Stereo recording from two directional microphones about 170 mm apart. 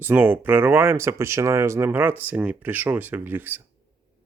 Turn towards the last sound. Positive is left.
turn(degrees=-10)  # may be behind; listen again after turning